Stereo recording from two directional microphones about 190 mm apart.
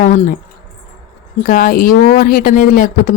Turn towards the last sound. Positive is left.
turn(degrees=50)  # may be behind; listen again after turning